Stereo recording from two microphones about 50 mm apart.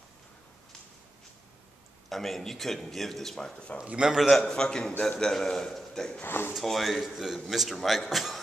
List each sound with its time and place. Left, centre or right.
2.0 s speech: centre
3.8 s a man's voice: centre
4.4 s a man's voice: centre
6.2 s speech: left
6.5 s speech: centre